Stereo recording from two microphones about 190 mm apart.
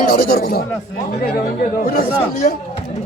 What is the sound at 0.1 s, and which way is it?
Speech, 50° left (ahead or behind).